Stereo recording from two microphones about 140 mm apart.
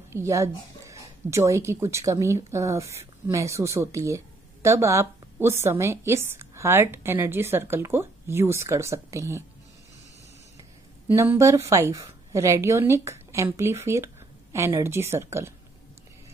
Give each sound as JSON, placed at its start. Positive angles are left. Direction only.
{"t": 0.1, "sound": "a woman's voice", "side_deg": -20}
{"t": 11.1, "sound": "a woman's voice", "side_deg": -15}